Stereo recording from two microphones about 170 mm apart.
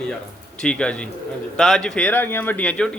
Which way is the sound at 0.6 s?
5° left (ahead or behind).